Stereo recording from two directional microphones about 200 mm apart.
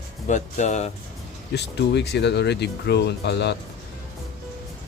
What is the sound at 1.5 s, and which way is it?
Speech, 55° left (ahead or behind).